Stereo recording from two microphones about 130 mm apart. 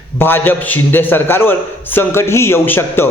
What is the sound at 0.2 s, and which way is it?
A man's voice, 15° left (ahead or behind).